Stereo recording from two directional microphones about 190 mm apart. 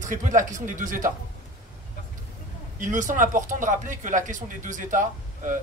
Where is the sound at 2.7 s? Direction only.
40° right (ahead or behind).